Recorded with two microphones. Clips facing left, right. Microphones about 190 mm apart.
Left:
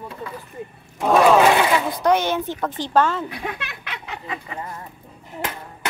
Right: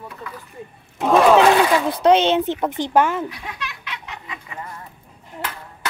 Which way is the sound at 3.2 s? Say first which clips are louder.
Left 2 dB; 55° left (ahead or behind).